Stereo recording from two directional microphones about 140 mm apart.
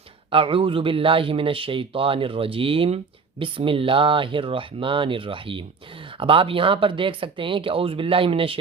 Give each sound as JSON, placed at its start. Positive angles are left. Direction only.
{"t": 0.3, "sound": "a man's voice", "side_deg": -40}